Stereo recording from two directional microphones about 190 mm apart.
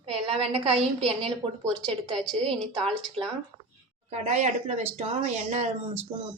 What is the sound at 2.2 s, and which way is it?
Speech, centre (ahead or behind).